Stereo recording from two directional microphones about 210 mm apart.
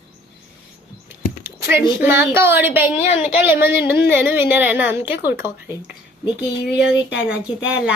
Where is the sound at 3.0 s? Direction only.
30° left (ahead or behind).